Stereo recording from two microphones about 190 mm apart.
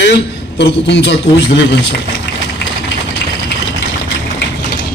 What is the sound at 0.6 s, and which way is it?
A man's voice, 65° left (ahead or behind).